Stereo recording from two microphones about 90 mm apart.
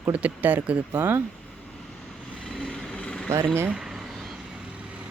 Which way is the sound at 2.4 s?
5° left (ahead or behind).